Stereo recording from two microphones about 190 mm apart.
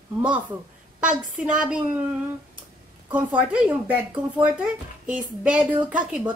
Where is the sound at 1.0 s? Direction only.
5° right (ahead or behind).